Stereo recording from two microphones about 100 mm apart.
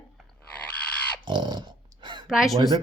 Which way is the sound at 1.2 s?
50° right (ahead or behind).